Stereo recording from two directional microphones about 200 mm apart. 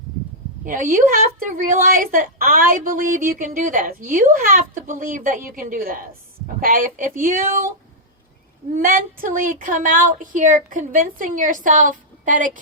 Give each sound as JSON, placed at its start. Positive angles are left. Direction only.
{"t": 0.6, "sound": "a woman's voice", "side_deg": -40}
{"t": 8.7, "sound": "speech", "side_deg": -45}